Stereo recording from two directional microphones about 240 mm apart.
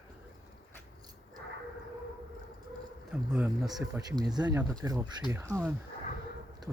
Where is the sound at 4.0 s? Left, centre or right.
Centre.